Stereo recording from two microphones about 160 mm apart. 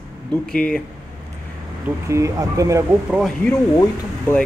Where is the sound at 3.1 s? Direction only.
5° right (ahead or behind).